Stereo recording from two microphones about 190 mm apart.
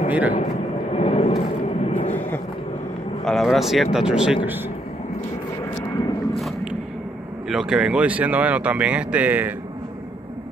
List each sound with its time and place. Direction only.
0.1 s speech: 10° right (ahead or behind)
0.9 s vehicle: 35° left (ahead or behind)
3.3 s speech: centre (ahead or behind)
6.3 s a sound: centre (ahead or behind)
7.4 s speech: centre (ahead or behind)